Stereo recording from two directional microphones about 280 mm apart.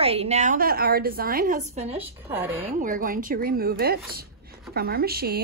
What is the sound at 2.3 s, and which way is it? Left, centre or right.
Speech, centre.